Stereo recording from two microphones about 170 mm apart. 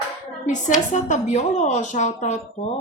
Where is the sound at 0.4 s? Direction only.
45° left (ahead or behind).